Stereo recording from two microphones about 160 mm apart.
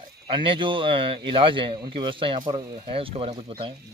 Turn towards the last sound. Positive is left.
turn(degrees=-35)  # may be behind; listen again after turning